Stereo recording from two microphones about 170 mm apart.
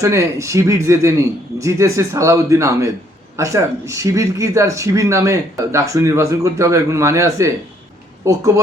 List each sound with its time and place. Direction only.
0.0 s speech: 15° right (ahead or behind)